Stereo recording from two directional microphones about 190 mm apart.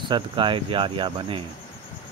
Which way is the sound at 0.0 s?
25° right (ahead or behind).